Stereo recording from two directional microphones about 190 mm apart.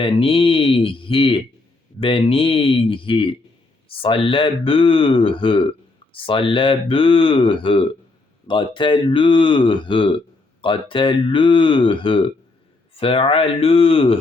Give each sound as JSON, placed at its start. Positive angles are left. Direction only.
{"t": 0.0, "sound": "speech", "side_deg": 30}